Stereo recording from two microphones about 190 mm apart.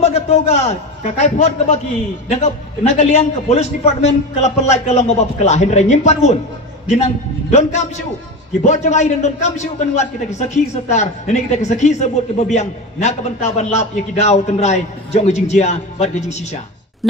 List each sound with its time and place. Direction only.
0.0 s a man's voice: 35° left (ahead or behind)
8.6 s a man's voice: 35° left (ahead or behind)